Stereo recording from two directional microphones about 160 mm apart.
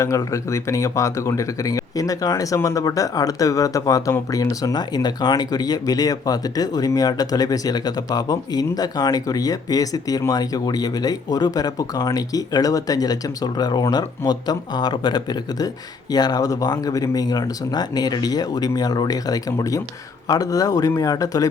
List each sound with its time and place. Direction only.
0.0 s speech: 20° left (ahead or behind)